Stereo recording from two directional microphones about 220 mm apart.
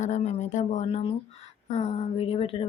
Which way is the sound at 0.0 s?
30° left (ahead or behind).